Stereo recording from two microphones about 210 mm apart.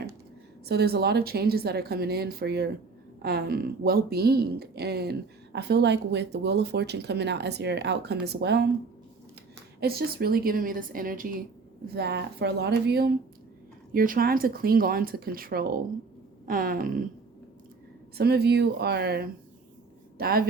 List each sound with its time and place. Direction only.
0.6 s speech: 50° right (ahead or behind)
9.8 s speech: 45° right (ahead or behind)
18.2 s speech: 50° right (ahead or behind)